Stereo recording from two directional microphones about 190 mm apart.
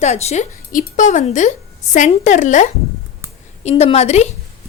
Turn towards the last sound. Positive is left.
turn(degrees=35)  # may be behind; listen again after turning